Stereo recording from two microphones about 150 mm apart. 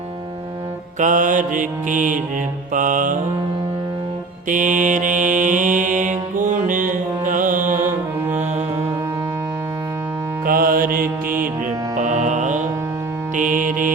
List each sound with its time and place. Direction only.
0.9 s mantra: 60° right (ahead or behind)
4.4 s mantra: 60° right (ahead or behind)
10.4 s mantra: 70° right (ahead or behind)
11.9 s music: 55° right (ahead or behind)